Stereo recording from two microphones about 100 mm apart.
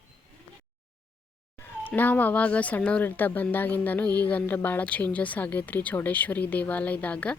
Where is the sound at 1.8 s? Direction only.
15° left (ahead or behind).